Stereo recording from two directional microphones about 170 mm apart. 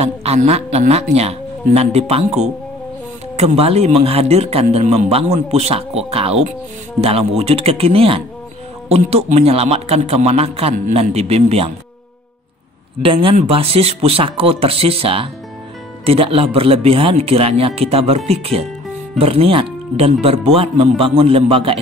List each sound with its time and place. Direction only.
0.0 s speech: 35° right (ahead or behind)
13.0 s speech: 30° right (ahead or behind)